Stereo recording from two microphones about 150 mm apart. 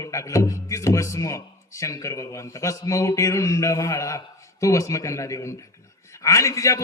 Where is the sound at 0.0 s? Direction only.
20° left (ahead or behind).